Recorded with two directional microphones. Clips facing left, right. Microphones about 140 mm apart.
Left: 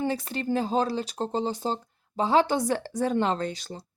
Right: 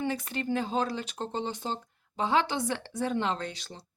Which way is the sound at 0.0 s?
35° left (ahead or behind).